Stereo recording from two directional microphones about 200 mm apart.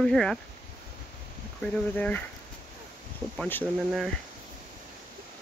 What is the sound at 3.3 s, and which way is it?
Speech, 10° left (ahead or behind).